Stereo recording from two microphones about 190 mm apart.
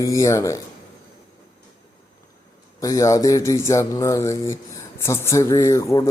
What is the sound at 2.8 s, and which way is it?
A man's voice, 15° left (ahead or behind).